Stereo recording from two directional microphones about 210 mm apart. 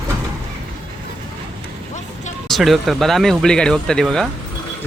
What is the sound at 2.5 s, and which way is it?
Speech, centre (ahead or behind).